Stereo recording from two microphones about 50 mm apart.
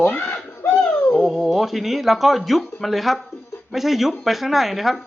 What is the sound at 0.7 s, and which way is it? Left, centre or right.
Bird, left.